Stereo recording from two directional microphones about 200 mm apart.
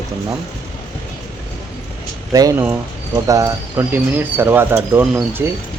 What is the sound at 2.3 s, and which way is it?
Speech, 15° right (ahead or behind).